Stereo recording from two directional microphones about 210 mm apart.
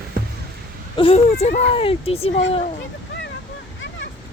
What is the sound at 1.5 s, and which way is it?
Speech, 30° left (ahead or behind).